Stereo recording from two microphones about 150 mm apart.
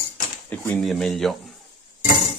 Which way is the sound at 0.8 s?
Centre (ahead or behind).